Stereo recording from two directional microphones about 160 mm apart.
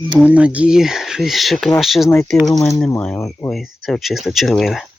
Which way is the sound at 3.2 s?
15° left (ahead or behind).